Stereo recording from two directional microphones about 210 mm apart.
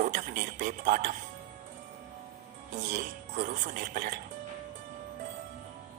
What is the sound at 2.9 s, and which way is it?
A man's voice, 40° right (ahead or behind).